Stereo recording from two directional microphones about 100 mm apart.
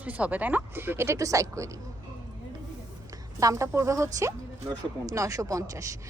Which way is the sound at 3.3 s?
30° right (ahead or behind).